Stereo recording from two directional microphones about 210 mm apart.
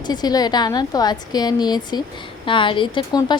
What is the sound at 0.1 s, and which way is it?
A woman's voice, 20° left (ahead or behind).